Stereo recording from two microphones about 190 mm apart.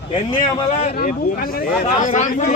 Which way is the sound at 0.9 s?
50° left (ahead or behind).